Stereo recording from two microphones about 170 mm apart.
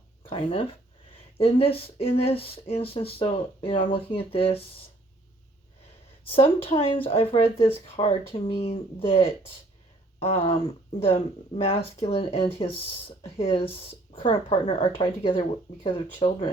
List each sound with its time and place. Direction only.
0.2 s speech: 35° left (ahead or behind)
6.3 s speech: 35° left (ahead or behind)